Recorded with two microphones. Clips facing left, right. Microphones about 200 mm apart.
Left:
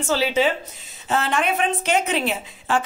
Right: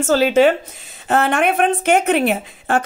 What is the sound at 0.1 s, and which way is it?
A woman's voice, 50° right (ahead or behind).